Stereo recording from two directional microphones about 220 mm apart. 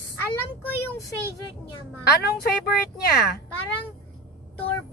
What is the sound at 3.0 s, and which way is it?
Speech, 45° left (ahead or behind).